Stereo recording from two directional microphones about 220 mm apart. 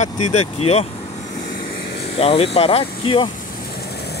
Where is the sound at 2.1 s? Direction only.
25° left (ahead or behind).